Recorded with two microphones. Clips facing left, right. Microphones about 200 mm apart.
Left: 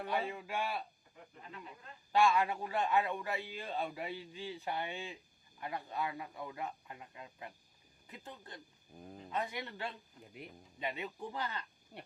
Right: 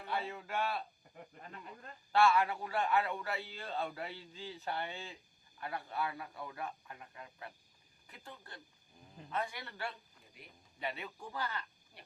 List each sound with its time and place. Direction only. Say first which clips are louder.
0.1 s a man's voice: even; 15° left (ahead or behind)
2.1 s a man's voice: even; 15° left (ahead or behind)
8.9 s speech: left 9 dB; 60° left (ahead or behind)
9.3 s a man's voice: left 1 dB; 20° left (ahead or behind)